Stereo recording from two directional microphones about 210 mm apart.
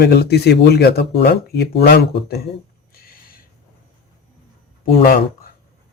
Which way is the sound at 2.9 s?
45° left (ahead or behind).